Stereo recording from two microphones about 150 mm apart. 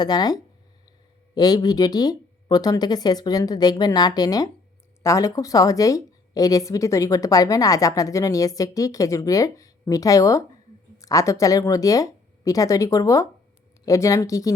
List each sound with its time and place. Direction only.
0.0 s a woman's voice: 25° left (ahead or behind)